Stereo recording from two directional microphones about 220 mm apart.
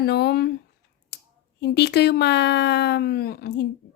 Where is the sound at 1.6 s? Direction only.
50° left (ahead or behind).